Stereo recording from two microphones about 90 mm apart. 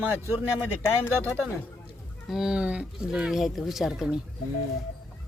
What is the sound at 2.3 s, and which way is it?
Speech, 5° right (ahead or behind).